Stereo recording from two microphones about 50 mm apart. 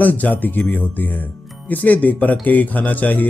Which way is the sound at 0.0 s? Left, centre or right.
Left.